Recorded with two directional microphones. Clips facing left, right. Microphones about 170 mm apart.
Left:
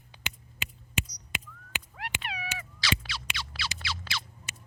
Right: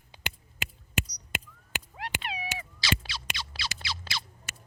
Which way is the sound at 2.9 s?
40° right (ahead or behind).